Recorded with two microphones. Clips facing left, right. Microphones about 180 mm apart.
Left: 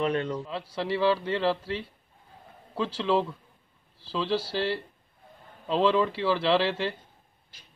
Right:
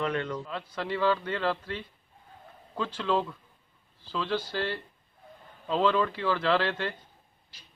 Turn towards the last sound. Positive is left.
turn(degrees=30)  # may be behind; listen again after turning